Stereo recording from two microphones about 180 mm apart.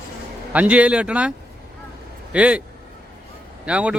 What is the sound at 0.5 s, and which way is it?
Speech, 10° right (ahead or behind).